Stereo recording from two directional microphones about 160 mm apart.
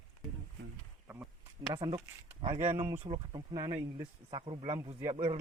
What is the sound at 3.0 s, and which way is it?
Speech, 25° right (ahead or behind).